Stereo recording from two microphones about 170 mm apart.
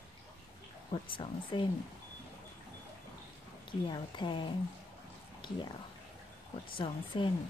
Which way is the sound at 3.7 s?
25° left (ahead or behind).